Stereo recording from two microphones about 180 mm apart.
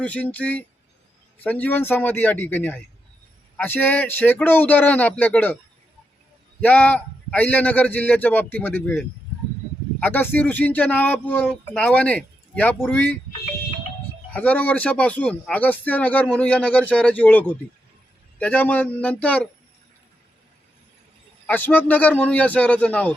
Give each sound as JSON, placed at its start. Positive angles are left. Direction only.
{"t": 0.0, "sound": "speech", "side_deg": 10}
{"t": 6.6, "sound": "speech", "side_deg": 10}
{"t": 14.3, "sound": "speech", "side_deg": 10}
{"t": 21.4, "sound": "speech", "side_deg": 10}